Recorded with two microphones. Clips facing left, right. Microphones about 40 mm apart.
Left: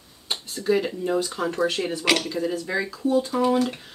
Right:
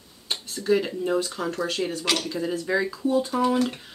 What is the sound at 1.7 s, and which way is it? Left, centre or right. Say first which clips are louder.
Speech: left 1 dB; left.